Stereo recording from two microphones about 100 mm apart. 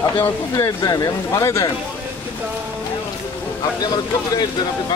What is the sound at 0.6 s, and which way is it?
Speech, 40° left (ahead or behind).